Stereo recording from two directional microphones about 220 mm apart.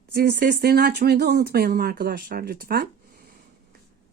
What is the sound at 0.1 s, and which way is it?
A woman's voice, 45° right (ahead or behind).